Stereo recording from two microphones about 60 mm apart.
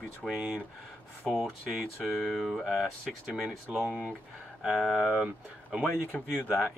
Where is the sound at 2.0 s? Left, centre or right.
Centre.